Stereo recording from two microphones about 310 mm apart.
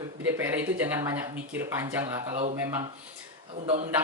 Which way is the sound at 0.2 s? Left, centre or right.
Centre.